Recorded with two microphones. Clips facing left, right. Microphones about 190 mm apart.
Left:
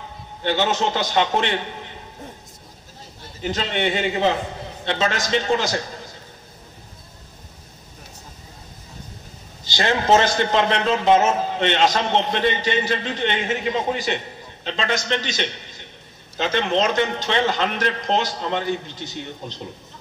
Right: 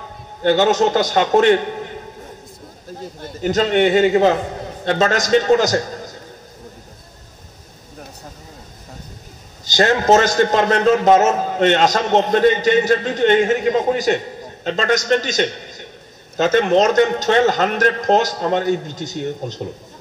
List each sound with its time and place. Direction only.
0.4 s a man's voice: 45° right (ahead or behind)
3.2 s a man's voice: 45° right (ahead or behind)
9.7 s a man's voice: 45° right (ahead or behind)